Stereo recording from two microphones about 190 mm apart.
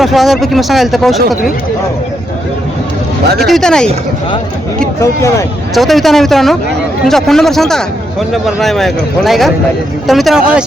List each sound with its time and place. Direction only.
0.0 s speech: centre (ahead or behind)
3.4 s speech: centre (ahead or behind)
4.9 s speech: 15° left (ahead or behind)
5.7 s speech: centre (ahead or behind)